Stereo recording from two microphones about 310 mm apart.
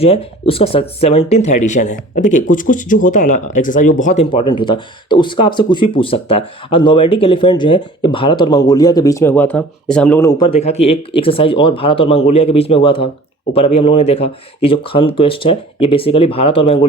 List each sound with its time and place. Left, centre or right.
0.0 s speech: centre